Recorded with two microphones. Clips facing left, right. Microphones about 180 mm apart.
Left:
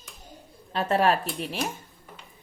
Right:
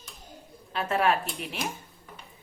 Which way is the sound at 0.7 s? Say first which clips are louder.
Left 3 dB; 35° left (ahead or behind).